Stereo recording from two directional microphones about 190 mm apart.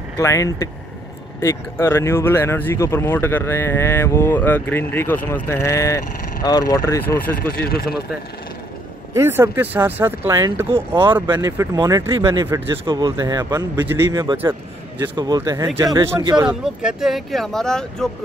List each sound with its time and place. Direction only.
0.2 s speech: 15° left (ahead or behind)
7.3 s speech: 55° left (ahead or behind)
9.1 s a man's voice: 15° right (ahead or behind)
16.4 s speech: 5° right (ahead or behind)